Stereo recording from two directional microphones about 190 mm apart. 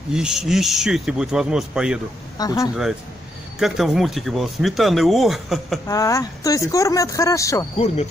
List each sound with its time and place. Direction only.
0.1 s speech: 5° right (ahead or behind)
2.3 s speech: 20° left (ahead or behind)
2.7 s speech: 5° right (ahead or behind)
5.9 s speech: 15° left (ahead or behind)